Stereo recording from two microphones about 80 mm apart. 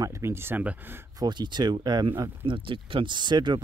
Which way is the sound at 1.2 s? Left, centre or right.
Right.